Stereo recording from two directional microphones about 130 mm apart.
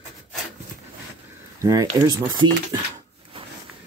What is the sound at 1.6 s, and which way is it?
Speech, 25° right (ahead or behind).